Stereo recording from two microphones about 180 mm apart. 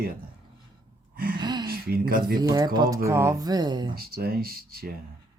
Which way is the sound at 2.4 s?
20° right (ahead or behind).